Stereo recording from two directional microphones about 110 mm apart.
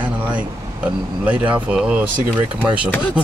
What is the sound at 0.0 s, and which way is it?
Speech, 15° right (ahead or behind).